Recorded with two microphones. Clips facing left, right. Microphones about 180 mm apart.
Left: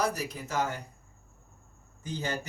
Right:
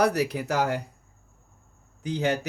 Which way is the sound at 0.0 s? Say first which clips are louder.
Right 8 dB; 70° right (ahead or behind).